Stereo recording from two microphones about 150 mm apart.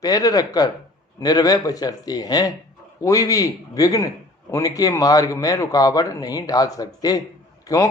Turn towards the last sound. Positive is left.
turn(degrees=20)  # may be behind; listen again after turning